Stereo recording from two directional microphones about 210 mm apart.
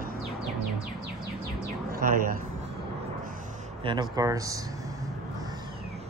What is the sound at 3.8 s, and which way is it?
Speech, 20° right (ahead or behind).